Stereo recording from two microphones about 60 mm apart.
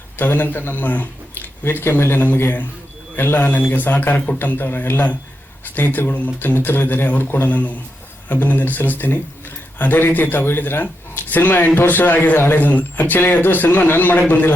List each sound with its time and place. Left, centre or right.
0.2 s speech: left